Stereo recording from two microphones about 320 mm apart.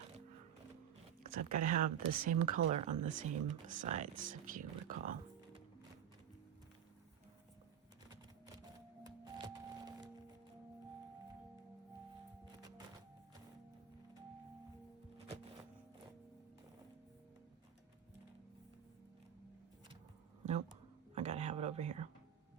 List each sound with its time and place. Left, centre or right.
1.3 s speech: right
9.0 s music: centre
20.4 s a sound: right
21.2 s whispering: right